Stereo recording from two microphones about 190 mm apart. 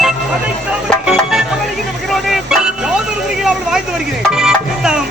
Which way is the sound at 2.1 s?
Centre (ahead or behind).